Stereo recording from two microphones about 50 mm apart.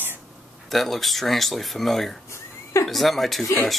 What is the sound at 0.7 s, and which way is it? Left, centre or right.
A man's voice, centre.